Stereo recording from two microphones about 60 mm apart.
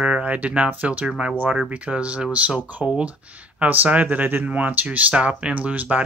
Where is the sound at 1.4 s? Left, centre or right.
Right.